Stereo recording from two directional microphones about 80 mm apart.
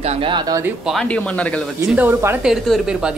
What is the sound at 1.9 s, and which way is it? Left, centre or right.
Speech, right.